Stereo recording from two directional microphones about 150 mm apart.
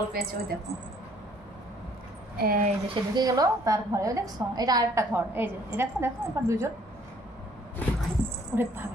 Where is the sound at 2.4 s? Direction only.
80° right.